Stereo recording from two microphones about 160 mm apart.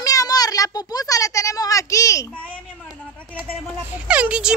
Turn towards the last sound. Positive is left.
turn(degrees=-5)  # may be behind; listen again after turning